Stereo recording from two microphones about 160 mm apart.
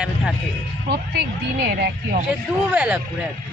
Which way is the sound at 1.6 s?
70° right (ahead or behind).